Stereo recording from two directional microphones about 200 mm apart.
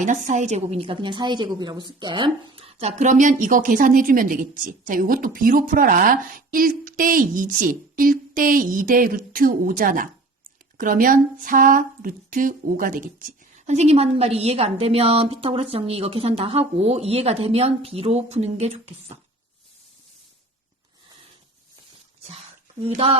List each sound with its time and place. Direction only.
0.3 s a woman's voice: 35° right (ahead or behind)
22.8 s speech: 25° right (ahead or behind)